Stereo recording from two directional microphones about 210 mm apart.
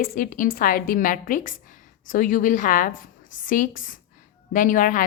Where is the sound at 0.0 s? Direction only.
40° left (ahead or behind).